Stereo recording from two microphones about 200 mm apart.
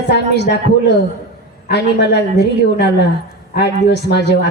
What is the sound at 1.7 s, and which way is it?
Speech, 55° left (ahead or behind).